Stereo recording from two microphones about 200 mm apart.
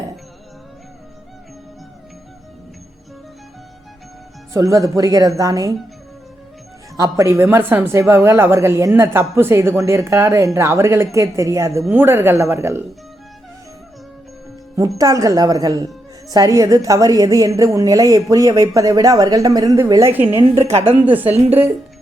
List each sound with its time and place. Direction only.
4.5 s a woman's voice: 15° right (ahead or behind)
6.9 s a woman's voice: 15° right (ahead or behind)
14.9 s a woman's voice: 15° right (ahead or behind)
20.4 s a woman's voice: 30° right (ahead or behind)
21.0 s a woman's voice: 10° right (ahead or behind)